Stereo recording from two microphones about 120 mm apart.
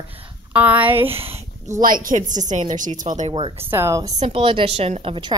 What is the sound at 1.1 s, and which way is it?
Speech, 55° right (ahead or behind).